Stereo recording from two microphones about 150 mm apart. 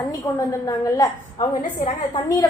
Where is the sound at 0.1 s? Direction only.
20° left (ahead or behind).